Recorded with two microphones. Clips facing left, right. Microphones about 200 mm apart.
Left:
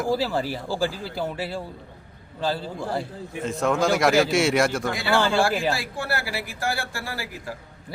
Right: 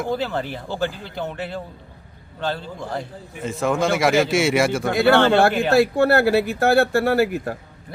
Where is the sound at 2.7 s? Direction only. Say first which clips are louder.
Left 1 dB; 5° left (ahead or behind).